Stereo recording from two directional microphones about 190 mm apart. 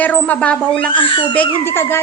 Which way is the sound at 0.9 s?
25° left (ahead or behind).